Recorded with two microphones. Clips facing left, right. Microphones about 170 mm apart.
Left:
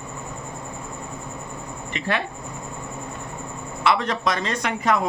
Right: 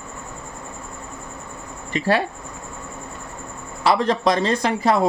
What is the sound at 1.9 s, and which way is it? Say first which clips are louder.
Speech: right 6 dB; 35° right (ahead or behind).